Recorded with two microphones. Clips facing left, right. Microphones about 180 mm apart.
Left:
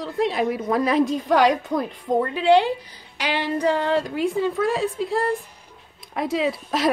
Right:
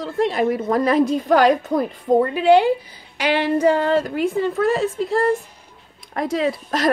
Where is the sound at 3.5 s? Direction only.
5° right (ahead or behind).